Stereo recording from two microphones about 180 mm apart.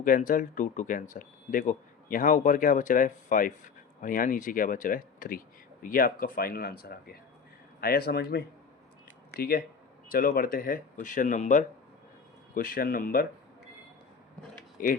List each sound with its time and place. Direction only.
0.0 s speech: 50° left (ahead or behind)
14.8 s speech: 50° left (ahead or behind)